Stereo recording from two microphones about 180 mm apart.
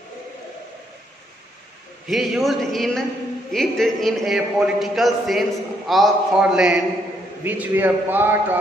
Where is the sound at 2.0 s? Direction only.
Centre (ahead or behind).